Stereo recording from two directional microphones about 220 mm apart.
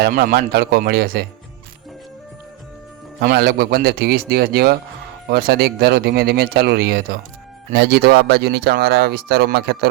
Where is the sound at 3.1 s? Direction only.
45° right (ahead or behind).